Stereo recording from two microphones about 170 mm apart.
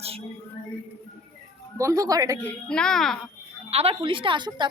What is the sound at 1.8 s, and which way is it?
Speech, 20° right (ahead or behind).